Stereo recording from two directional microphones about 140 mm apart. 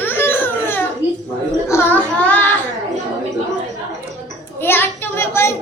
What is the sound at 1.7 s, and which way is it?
Child singing, 15° left (ahead or behind).